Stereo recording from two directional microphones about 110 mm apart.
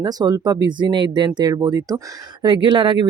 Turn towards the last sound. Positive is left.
turn(degrees=-45)  # may be behind; listen again after turning